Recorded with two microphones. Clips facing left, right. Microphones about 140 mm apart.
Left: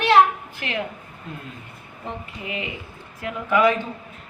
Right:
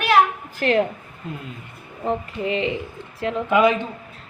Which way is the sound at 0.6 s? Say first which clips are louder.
Right 12 dB; 40° right (ahead or behind).